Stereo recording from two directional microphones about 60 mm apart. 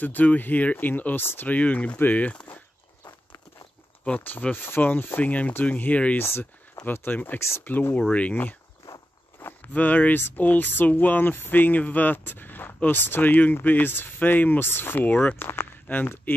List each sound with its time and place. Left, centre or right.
0.0 s speech: left
1.5 s speech: left
4.2 s speech: left
4.6 s speech: left
4.9 s speech: left
6.1 s speech: left
7.3 s speech: left
7.6 s speech: left